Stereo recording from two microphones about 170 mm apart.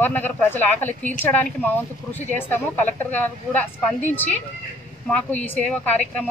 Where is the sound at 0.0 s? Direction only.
10° left (ahead or behind).